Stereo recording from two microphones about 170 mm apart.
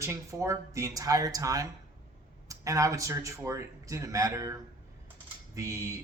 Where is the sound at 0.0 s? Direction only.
15° right (ahead or behind).